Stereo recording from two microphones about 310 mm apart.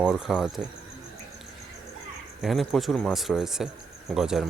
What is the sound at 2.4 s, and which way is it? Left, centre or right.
Speech, centre.